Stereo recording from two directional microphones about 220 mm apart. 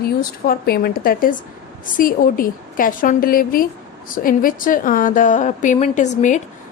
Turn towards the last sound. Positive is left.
turn(degrees=35)  # may be behind; listen again after turning